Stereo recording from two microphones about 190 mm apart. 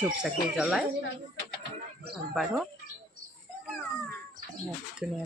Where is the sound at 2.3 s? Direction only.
Centre (ahead or behind).